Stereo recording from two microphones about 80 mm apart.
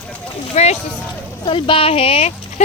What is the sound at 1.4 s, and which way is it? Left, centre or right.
Speech, left.